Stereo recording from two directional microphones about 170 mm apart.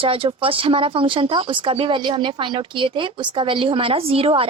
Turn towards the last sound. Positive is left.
turn(degrees=-35)  # may be behind; listen again after turning